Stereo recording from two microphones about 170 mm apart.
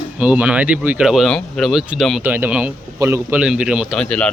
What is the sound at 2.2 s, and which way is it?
A man's voice, 10° right (ahead or behind).